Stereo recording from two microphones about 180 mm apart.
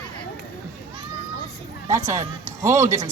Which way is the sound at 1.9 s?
15° right (ahead or behind).